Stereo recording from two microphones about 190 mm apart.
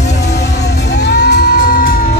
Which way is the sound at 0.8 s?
60° left (ahead or behind).